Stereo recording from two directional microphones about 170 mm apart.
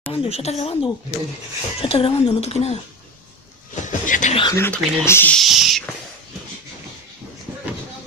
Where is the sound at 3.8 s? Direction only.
50° left (ahead or behind).